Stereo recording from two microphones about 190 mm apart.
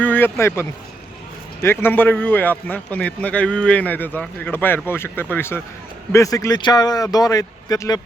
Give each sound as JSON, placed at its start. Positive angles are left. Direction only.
{"t": 0.0, "sound": "speech", "side_deg": 10}